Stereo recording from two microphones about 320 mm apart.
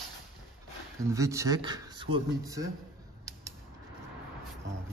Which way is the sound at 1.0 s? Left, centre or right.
Centre.